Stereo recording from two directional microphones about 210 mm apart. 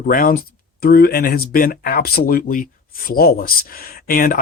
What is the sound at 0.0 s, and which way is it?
Speech, 40° left (ahead or behind).